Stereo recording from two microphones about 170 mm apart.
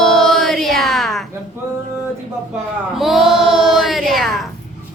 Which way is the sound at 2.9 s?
Centre (ahead or behind).